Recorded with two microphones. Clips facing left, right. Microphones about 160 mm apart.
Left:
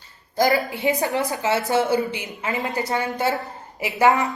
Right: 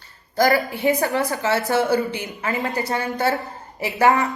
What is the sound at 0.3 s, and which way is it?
A woman's voice, 20° left (ahead or behind).